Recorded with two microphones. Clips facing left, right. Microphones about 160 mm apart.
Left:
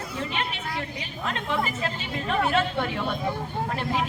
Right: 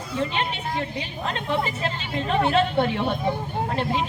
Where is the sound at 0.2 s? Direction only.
30° right (ahead or behind).